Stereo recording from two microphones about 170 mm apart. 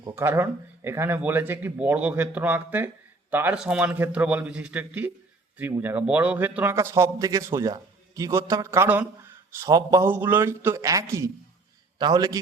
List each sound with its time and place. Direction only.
0.0 s a man's voice: 15° right (ahead or behind)